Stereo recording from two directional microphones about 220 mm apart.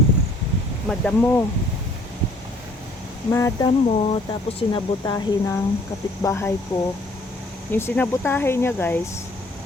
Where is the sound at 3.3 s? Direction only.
15° left (ahead or behind).